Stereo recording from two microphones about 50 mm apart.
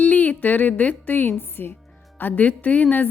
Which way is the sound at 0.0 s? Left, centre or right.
Left.